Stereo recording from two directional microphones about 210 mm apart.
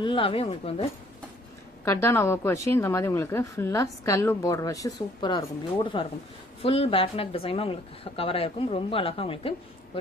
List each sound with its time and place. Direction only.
0.0 s speech: 25° left (ahead or behind)
1.9 s a woman's voice: 10° left (ahead or behind)